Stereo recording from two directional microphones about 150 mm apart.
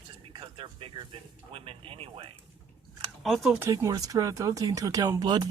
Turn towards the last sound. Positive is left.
turn(degrees=-25)  # may be behind; listen again after turning